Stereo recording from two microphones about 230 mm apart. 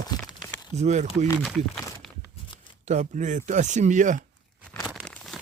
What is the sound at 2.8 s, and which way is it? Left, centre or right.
Speech, right.